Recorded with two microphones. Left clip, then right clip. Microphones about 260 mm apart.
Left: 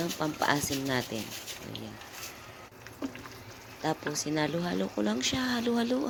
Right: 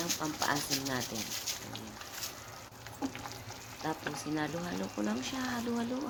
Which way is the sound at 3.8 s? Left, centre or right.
Left.